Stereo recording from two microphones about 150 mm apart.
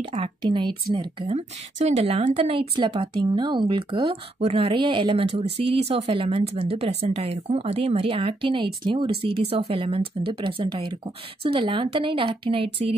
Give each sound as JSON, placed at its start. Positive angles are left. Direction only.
{"t": 0.0, "sound": "speech", "side_deg": -40}
{"t": 1.3, "sound": "speech", "side_deg": -50}